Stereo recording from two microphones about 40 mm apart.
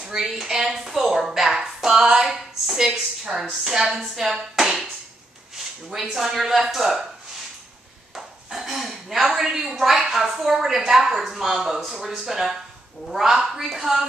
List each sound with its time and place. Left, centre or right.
0.0 s a woman's voice: centre
2.2 s a woman's voice: centre
2.8 s a woman's voice: centre
5.9 s speech: centre
8.1 s a sound: centre
10.4 s a woman's voice: centre